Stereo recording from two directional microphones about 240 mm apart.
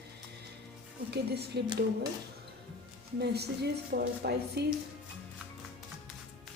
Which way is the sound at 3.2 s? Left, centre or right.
Right.